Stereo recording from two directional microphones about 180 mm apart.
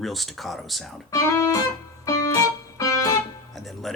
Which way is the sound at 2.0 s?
20° left (ahead or behind).